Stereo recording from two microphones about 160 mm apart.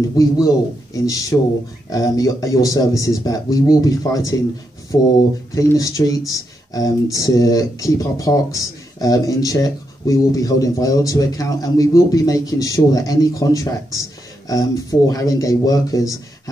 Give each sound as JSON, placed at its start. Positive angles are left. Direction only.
{"t": 0.1, "sound": "speech", "side_deg": 20}